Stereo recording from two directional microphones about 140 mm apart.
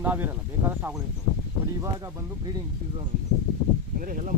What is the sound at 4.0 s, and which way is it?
Speech, 75° right (ahead or behind).